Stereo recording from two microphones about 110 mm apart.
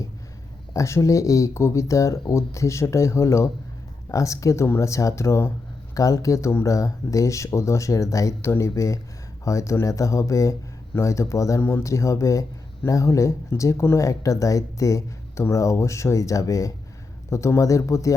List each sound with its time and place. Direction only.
0.7 s speech: 25° left (ahead or behind)